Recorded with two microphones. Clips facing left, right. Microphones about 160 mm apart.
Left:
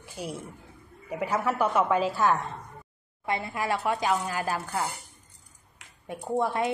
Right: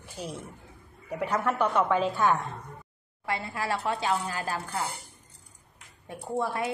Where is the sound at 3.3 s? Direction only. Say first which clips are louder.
Left 2 dB; 20° left (ahead or behind).